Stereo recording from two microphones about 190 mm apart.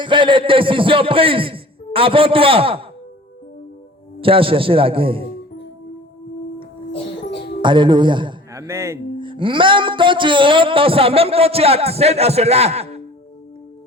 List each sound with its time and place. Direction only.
0.0 s music: 25° right (ahead or behind)
4.2 s music: 30° right (ahead or behind)
7.6 s a man's voice: 25° right (ahead or behind)
8.6 s speech: 15° right (ahead or behind)
9.1 s music: 25° right (ahead or behind)